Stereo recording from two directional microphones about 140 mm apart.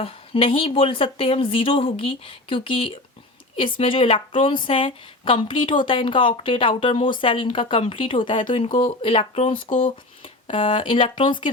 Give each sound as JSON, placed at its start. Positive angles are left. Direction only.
{"t": 0.0, "sound": "a woman's voice", "side_deg": 40}
{"t": 9.6, "sound": "speech", "side_deg": 65}
{"t": 10.5, "sound": "a woman's voice", "side_deg": 40}